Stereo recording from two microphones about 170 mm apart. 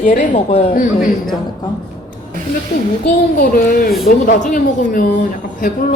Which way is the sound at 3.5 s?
55° left (ahead or behind).